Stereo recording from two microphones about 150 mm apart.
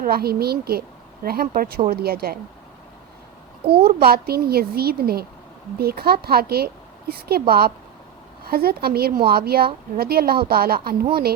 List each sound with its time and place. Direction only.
0.0 s a woman's voice: 90° right
3.8 s a woman's voice: 90° right